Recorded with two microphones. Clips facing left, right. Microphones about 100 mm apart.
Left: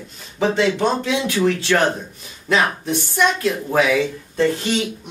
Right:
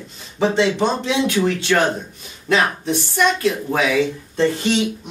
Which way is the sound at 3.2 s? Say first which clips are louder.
Right 1 dB; centre (ahead or behind).